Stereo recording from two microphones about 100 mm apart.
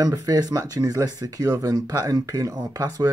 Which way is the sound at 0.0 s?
35° right (ahead or behind).